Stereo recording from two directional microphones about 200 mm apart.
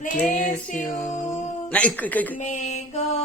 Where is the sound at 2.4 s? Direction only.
35° left (ahead or behind).